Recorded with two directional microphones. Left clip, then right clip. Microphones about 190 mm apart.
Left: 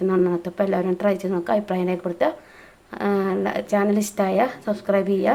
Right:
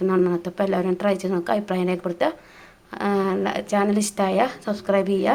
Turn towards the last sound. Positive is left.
turn(degrees=-5)  # may be behind; listen again after turning